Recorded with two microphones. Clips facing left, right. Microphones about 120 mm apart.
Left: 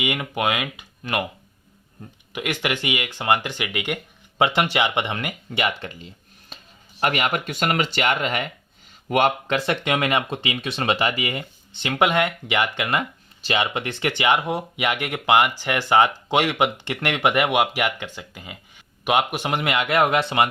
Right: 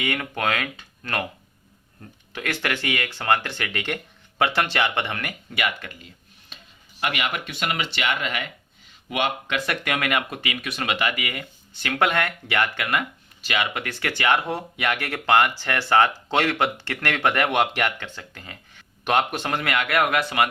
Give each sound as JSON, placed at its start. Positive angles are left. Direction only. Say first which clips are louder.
{"t": 0.0, "sound": "speech", "louder": "left 2 dB", "side_deg": 15}
{"t": 6.5, "sound": "a sound", "louder": "left 3 dB", "side_deg": 40}
{"t": 7.0, "sound": "speech", "louder": "left 4 dB", "side_deg": 40}
{"t": 9.6, "sound": "speech", "louder": "left 4 dB", "side_deg": 25}